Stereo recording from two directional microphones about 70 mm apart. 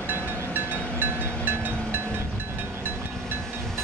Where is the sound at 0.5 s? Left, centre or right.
Right.